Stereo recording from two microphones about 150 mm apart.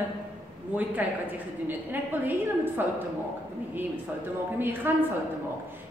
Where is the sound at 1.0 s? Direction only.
10° right (ahead or behind).